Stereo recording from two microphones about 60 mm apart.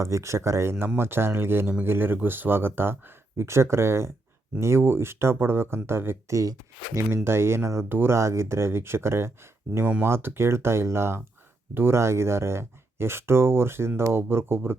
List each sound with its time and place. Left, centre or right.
0.0 s speech: right
6.3 s speech: right
7.3 s speech: right